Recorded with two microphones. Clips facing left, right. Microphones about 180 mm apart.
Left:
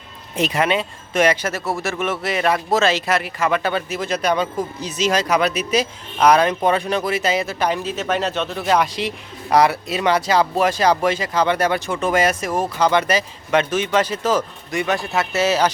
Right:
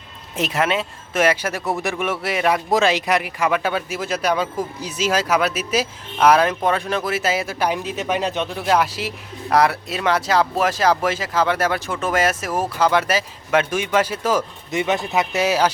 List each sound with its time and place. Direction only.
0.3 s speech: centre (ahead or behind)
14.7 s speech: 20° right (ahead or behind)